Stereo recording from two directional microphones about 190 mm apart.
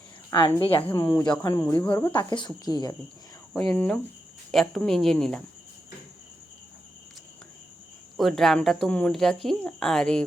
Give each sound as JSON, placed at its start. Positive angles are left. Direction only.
{"t": 0.3, "sound": "a woman's voice", "side_deg": 25}
{"t": 0.9, "sound": "speech", "side_deg": 15}
{"t": 2.3, "sound": "a woman's voice", "side_deg": 25}
{"t": 3.5, "sound": "speech", "side_deg": 5}
{"t": 8.1, "sound": "speech", "side_deg": 0}